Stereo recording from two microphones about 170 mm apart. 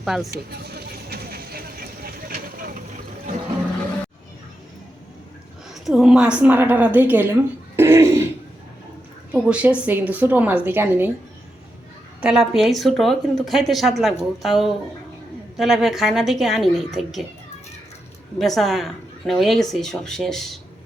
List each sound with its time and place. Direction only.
0.0 s speech: centre (ahead or behind)
0.3 s vehicle: 65° right (ahead or behind)
5.7 s speech: centre (ahead or behind)
9.3 s speech: 10° right (ahead or behind)
12.2 s speech: 5° right (ahead or behind)
18.3 s speech: centre (ahead or behind)